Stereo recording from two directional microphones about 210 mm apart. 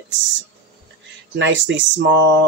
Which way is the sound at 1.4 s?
60° right (ahead or behind).